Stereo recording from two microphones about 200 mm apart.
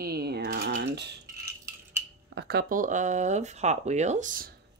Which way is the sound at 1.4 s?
15° right (ahead or behind).